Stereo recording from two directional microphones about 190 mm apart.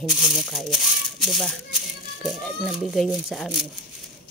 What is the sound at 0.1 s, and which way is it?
Speech, 5° right (ahead or behind).